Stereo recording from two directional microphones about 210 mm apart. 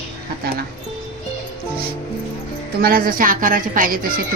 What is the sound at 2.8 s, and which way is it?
A woman's voice, 45° right (ahead or behind).